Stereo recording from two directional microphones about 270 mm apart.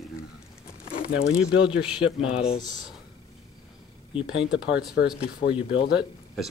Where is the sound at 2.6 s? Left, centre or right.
Centre.